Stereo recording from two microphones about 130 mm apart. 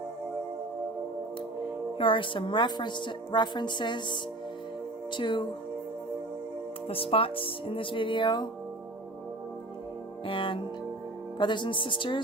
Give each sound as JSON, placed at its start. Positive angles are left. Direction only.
{"t": 2.0, "sound": "a woman's voice", "side_deg": 40}
{"t": 6.8, "sound": "speech", "side_deg": 45}
{"t": 10.2, "sound": "a woman's voice", "side_deg": 40}